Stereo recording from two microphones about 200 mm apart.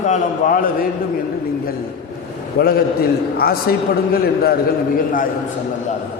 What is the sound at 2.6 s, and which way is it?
A man's voice, 50° left (ahead or behind).